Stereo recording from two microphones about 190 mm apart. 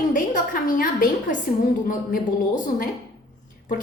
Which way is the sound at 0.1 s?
45° left (ahead or behind).